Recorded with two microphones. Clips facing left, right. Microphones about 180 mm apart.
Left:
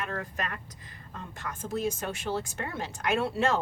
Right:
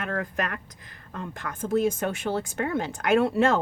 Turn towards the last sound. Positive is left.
turn(degrees=-55)  # may be behind; listen again after turning